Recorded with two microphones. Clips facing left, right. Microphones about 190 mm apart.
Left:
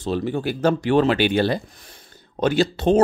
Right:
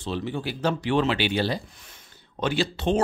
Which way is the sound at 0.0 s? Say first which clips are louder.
Left 6 dB; 45° left (ahead or behind).